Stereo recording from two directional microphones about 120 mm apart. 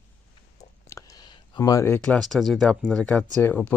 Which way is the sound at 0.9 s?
25° left (ahead or behind).